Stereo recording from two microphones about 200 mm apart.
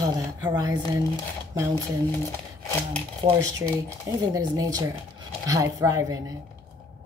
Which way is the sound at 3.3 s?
15° right (ahead or behind).